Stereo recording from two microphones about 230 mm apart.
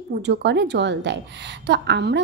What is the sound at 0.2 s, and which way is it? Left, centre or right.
A woman's voice, right.